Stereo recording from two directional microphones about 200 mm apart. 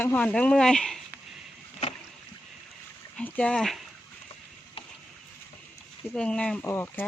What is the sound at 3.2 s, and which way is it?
Speech, 5° left (ahead or behind).